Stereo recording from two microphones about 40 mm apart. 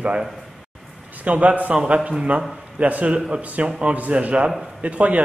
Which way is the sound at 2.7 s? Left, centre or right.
Right.